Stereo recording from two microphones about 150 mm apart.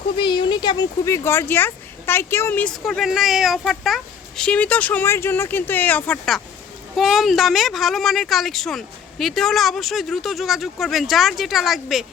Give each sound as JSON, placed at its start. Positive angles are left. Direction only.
{"t": 0.2, "sound": "speech", "side_deg": 30}
{"t": 2.7, "sound": "a woman's voice", "side_deg": 0}